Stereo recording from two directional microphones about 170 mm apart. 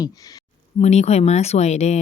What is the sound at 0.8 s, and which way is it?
Speech, 40° left (ahead or behind).